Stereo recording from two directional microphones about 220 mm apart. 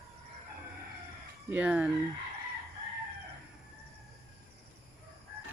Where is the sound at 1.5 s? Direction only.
5° right (ahead or behind).